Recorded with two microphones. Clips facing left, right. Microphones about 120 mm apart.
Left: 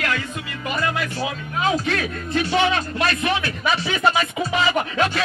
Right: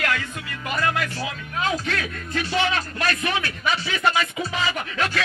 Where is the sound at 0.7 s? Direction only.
15° left (ahead or behind).